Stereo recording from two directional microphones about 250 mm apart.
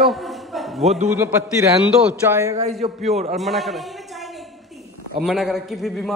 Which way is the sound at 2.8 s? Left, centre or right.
Right.